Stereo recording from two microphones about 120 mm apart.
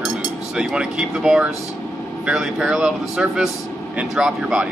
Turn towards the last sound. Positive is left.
turn(degrees=-5)  # may be behind; listen again after turning